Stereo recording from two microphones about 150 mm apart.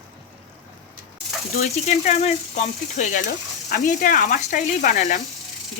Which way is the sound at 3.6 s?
75° left (ahead or behind).